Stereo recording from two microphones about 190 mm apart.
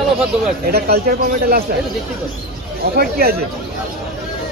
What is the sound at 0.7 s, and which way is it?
Speech, 55° right (ahead or behind).